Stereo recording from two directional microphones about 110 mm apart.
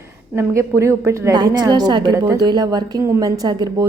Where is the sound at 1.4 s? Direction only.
40° right (ahead or behind).